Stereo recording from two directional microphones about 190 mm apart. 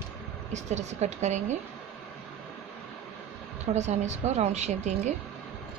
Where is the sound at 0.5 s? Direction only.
35° right (ahead or behind).